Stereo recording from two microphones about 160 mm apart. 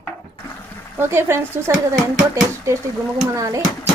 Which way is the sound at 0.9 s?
15° right (ahead or behind).